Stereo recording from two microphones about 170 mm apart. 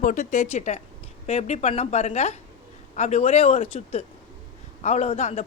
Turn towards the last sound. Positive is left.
turn(degrees=40)  # may be behind; listen again after turning